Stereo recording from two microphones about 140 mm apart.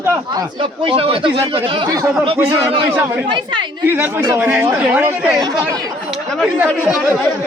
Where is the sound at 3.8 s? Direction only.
15° right (ahead or behind).